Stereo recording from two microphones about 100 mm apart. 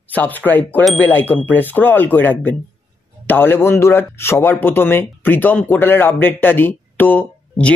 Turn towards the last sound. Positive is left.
turn(degrees=15)  # may be behind; listen again after turning